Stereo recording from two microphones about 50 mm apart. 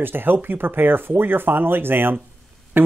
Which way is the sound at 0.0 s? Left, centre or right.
Right.